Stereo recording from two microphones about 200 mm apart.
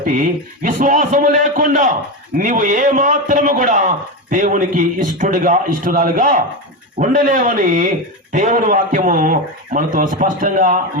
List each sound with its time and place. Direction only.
0.0 s a man's voice: 40° right (ahead or behind)